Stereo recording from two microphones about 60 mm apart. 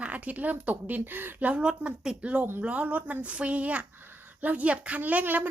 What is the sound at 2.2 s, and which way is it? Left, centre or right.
Speech, right.